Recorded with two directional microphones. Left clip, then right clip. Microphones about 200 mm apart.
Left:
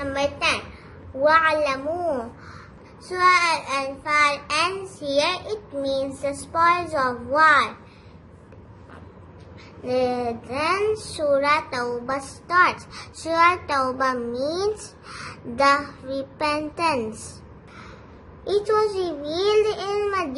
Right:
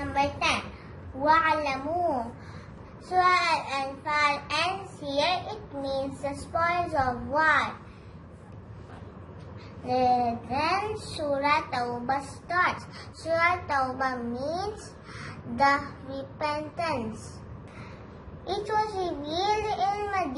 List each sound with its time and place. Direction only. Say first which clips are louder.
0.0 s a sound: left 3 dB; 55° left (ahead or behind)
1.2 s a child's voice: left 5 dB; 55° left (ahead or behind)
3.1 s a child's voice: left 4 dB; 55° left (ahead or behind)
9.8 s a child's voice: left 1 dB; 55° left (ahead or behind)
15.1 s child singing: left 6 dB; 55° left (ahead or behind)
18.4 s a child's voice: left 7 dB; 55° left (ahead or behind)